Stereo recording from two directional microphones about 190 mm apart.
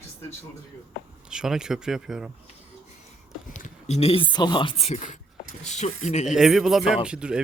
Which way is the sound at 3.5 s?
40° left (ahead or behind).